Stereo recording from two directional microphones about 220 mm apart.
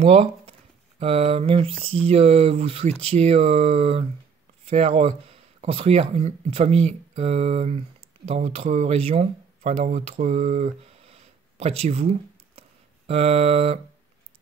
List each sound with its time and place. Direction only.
0.0 s speech: 25° right (ahead or behind)